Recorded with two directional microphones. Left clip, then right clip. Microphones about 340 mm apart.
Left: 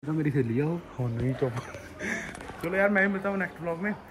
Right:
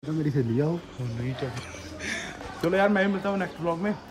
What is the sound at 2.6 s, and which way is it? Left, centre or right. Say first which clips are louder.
Speech: right 3 dB; centre.